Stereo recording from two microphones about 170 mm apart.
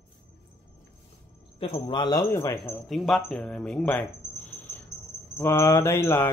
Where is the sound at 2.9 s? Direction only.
Centre (ahead or behind).